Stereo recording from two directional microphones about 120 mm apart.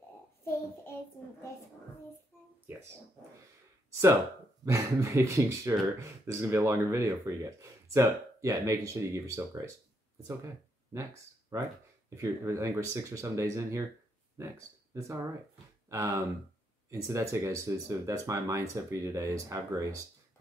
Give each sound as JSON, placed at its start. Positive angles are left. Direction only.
{"t": 0.4, "sound": "child singing", "side_deg": 20}
{"t": 4.6, "sound": "speech", "side_deg": -25}
{"t": 11.5, "sound": "speech", "side_deg": -25}
{"t": 15.0, "sound": "speech", "side_deg": -25}